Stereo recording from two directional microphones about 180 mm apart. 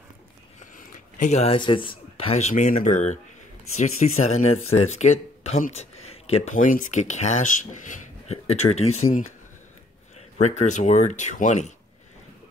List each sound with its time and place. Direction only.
0.6 s speech: 45° left (ahead or behind)
10.3 s speech: 40° left (ahead or behind)